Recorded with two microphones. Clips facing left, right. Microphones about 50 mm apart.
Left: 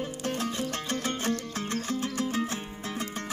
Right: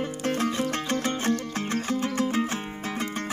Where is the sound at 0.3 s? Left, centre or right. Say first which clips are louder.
Right 6 dB; right.